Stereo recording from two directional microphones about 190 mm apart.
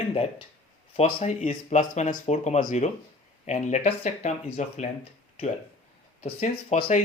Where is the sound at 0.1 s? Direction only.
30° left (ahead or behind).